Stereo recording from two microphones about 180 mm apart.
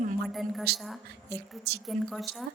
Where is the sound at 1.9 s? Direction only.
Centre (ahead or behind).